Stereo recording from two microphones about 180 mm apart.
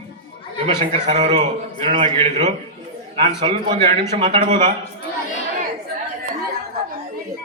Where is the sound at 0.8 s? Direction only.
40° right (ahead or behind).